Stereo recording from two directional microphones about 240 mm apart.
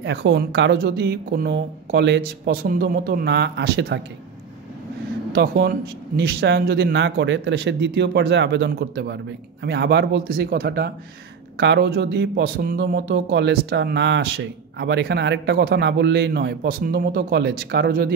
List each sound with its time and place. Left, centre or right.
0.0 s a man's voice: right
5.3 s a man's voice: right